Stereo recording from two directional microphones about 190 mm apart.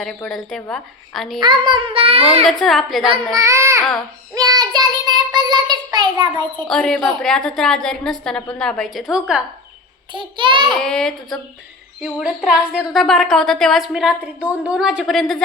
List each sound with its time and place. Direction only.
0.0 s a woman's voice: centre (ahead or behind)
1.4 s child singing: 25° right (ahead or behind)
2.4 s a woman's voice: centre (ahead or behind)
3.3 s speech: 15° right (ahead or behind)
4.4 s child singing: 20° right (ahead or behind)
6.7 s a woman's voice: 5° left (ahead or behind)
10.1 s child singing: 25° right (ahead or behind)
10.8 s a woman's voice: 5° left (ahead or behind)